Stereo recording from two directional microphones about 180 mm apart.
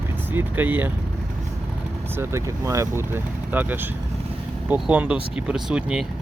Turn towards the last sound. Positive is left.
turn(degrees=-5)  # may be behind; listen again after turning